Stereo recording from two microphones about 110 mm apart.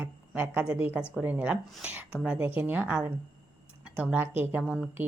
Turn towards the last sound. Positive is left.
turn(degrees=-5)  # may be behind; listen again after turning